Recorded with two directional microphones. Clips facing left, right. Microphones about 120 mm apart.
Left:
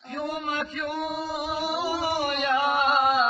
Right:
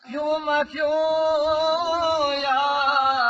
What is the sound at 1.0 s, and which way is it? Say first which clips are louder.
Music: right 12 dB; 90° right.